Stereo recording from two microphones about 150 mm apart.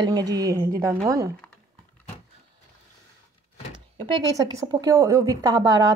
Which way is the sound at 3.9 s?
30° right (ahead or behind).